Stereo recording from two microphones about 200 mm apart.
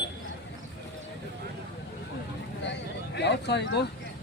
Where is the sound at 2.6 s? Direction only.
60° left (ahead or behind).